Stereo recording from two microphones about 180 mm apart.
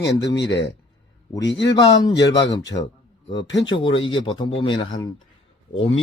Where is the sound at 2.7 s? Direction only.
30° left (ahead or behind).